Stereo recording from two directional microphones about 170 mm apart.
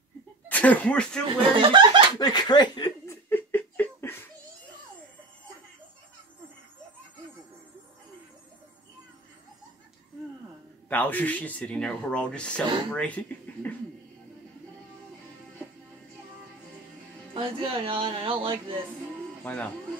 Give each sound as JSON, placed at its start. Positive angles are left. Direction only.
{"t": 0.5, "sound": "speech", "side_deg": 10}
{"t": 1.2, "sound": "speech", "side_deg": -30}
{"t": 2.1, "sound": "speech", "side_deg": 25}
{"t": 3.3, "sound": "laughter", "side_deg": 10}
{"t": 10.9, "sound": "speech", "side_deg": 10}
{"t": 17.3, "sound": "speech", "side_deg": -30}
{"t": 19.4, "sound": "speech", "side_deg": 10}